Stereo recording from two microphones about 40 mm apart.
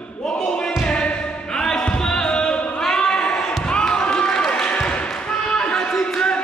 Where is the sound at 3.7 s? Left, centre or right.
Centre.